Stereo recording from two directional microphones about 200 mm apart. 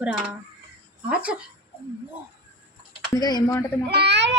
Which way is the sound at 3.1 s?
20° left (ahead or behind).